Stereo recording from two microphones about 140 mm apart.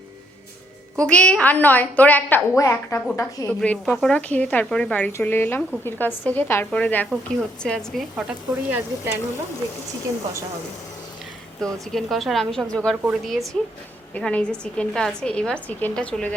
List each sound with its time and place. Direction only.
0.9 s a woman's voice: 5° left (ahead or behind); by 3.5 s 25° left (ahead or behind)
3.6 s speech: 5° left (ahead or behind)
8.1 s speech: 15° right (ahead or behind)
11.6 s speech: centre (ahead or behind)